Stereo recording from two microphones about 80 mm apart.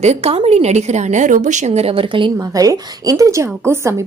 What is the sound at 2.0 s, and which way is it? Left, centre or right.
Speech, right.